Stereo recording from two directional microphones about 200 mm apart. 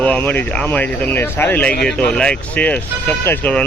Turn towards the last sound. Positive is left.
turn(degrees=10)  # may be behind; listen again after turning